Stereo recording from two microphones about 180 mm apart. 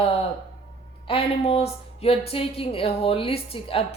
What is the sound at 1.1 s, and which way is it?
A woman's voice, 30° left (ahead or behind).